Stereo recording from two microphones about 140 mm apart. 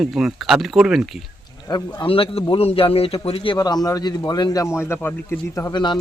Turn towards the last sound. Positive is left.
turn(degrees=30)  # may be behind; listen again after turning